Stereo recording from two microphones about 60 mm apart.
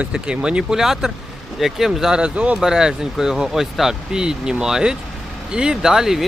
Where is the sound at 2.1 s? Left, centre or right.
Centre.